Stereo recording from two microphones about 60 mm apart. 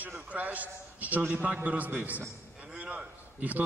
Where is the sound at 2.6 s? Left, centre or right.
Right.